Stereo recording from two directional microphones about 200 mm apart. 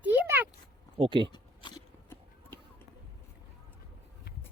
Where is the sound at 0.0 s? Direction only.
10° right (ahead or behind).